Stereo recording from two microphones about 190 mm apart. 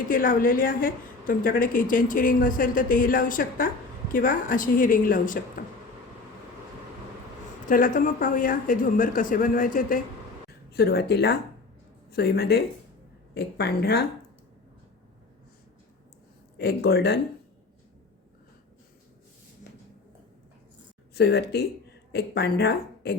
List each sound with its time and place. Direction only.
0.1 s a woman's voice: 45° left (ahead or behind)
7.7 s a woman's voice: 45° left (ahead or behind)
10.7 s speech: 55° left (ahead or behind)
16.6 s speech: 60° left (ahead or behind)
21.2 s a woman's voice: 60° left (ahead or behind)